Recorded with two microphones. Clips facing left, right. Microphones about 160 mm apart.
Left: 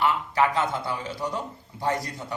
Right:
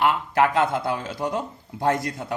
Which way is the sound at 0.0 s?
55° right (ahead or behind).